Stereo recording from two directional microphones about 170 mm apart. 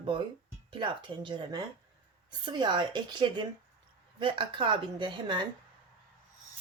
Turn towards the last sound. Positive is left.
turn(degrees=-25)  # may be behind; listen again after turning